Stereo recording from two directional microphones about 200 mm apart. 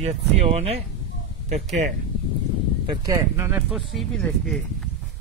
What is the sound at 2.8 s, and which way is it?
Speech, 15° right (ahead or behind).